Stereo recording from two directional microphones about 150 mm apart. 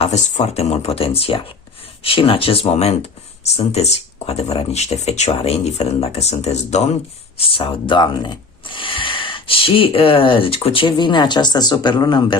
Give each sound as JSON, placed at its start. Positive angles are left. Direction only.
{"t": 0.0, "sound": "speech", "side_deg": 45}